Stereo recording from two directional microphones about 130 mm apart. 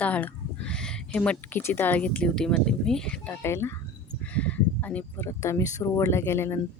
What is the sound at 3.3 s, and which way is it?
Speech, 20° left (ahead or behind).